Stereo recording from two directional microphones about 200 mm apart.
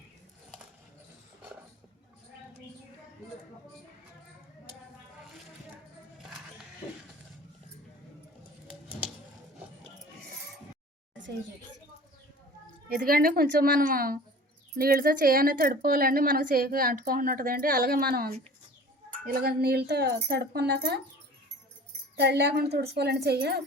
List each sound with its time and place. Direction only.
12.9 s a woman's voice: 45° right (ahead or behind)
22.1 s speech: 55° right (ahead or behind)